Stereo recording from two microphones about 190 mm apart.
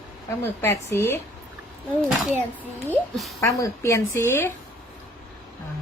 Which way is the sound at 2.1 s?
Centre (ahead or behind).